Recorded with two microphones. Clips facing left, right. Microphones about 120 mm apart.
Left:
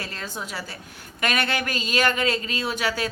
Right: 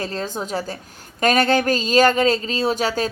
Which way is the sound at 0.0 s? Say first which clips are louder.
Right 8 dB; 30° right (ahead or behind).